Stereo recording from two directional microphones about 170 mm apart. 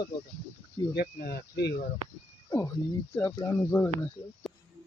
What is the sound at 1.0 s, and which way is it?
Speech, 65° left (ahead or behind).